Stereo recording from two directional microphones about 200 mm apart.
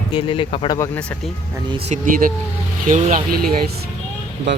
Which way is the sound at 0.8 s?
5° left (ahead or behind).